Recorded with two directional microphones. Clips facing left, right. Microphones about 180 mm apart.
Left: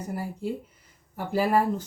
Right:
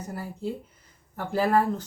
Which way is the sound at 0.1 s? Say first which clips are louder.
Left 2 dB; 15° left (ahead or behind).